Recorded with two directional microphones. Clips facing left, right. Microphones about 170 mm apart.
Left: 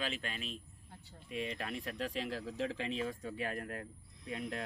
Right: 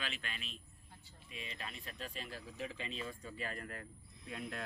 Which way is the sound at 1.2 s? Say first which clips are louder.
Left 9 dB; 60° left (ahead or behind).